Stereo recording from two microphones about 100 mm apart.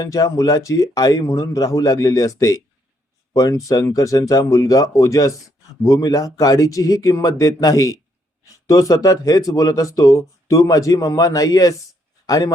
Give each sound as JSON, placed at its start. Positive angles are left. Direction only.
{"t": 0.0, "sound": "speech", "side_deg": 35}